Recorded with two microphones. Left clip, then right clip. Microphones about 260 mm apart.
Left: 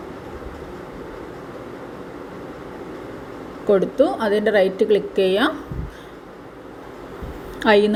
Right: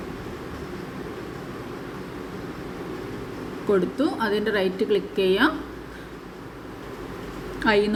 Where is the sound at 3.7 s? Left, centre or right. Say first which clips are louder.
Left 6 dB; centre.